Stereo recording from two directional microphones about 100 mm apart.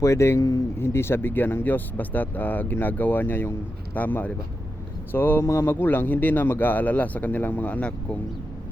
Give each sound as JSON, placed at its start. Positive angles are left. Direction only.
{"t": 0.0, "sound": "speech", "side_deg": 30}
{"t": 0.8, "sound": "a man's voice", "side_deg": 25}